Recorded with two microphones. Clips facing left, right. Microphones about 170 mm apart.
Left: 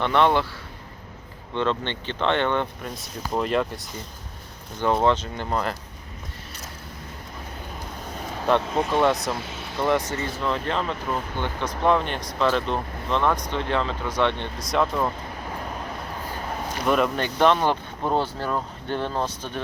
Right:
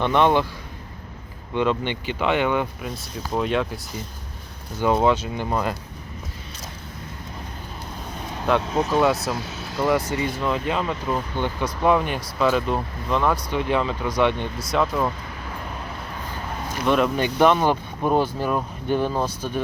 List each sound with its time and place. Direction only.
0.0 s speech: 20° right (ahead or behind)
1.5 s speech: 10° right (ahead or behind)
4.8 s speech: 10° right (ahead or behind)
8.4 s speech: centre (ahead or behind)
16.8 s speech: centre (ahead or behind)
17.2 s speech: 10° right (ahead or behind)